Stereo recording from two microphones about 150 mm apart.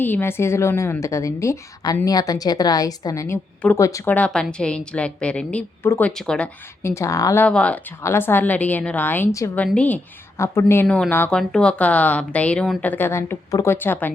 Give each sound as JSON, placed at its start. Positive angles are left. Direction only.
{"t": 0.0, "sound": "a woman's voice", "side_deg": 15}
{"t": 4.1, "sound": "speech", "side_deg": 5}
{"t": 6.8, "sound": "a woman's voice", "side_deg": 20}
{"t": 7.4, "sound": "speech", "side_deg": 10}